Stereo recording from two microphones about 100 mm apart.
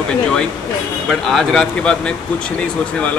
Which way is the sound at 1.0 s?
5° left (ahead or behind).